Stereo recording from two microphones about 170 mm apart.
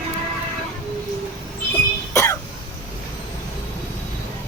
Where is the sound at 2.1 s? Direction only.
20° left (ahead or behind).